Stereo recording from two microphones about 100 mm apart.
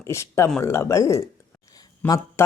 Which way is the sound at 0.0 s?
30° left (ahead or behind).